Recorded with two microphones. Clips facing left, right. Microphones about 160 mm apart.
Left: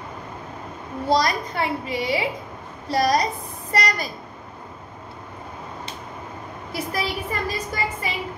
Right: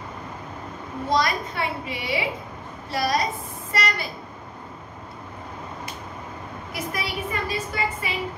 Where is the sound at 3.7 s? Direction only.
40° left (ahead or behind).